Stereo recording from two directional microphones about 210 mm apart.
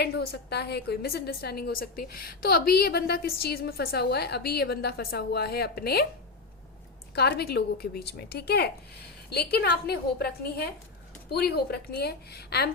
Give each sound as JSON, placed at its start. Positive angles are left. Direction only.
{"t": 0.0, "sound": "a woman's voice", "side_deg": 50}
{"t": 7.2, "sound": "a woman's voice", "side_deg": 50}